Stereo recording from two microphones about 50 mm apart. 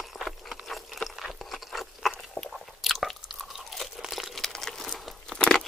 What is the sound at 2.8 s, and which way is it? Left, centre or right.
Chewing, centre.